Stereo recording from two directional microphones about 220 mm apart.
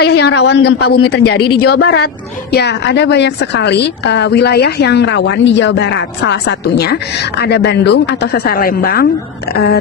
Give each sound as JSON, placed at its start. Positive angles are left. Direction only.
{"t": 0.0, "sound": "a woman's voice", "side_deg": 50}